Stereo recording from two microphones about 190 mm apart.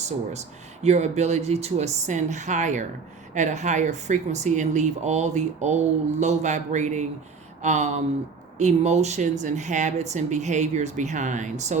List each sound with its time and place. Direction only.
0.3 s speech: 35° right (ahead or behind)